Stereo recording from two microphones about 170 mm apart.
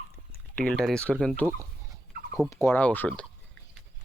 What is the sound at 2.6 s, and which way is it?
Speech, 10° left (ahead or behind).